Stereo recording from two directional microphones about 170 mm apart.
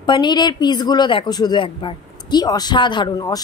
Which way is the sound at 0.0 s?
25° left (ahead or behind).